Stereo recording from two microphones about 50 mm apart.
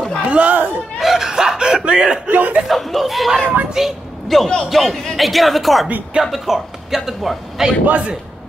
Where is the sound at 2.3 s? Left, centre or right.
Right.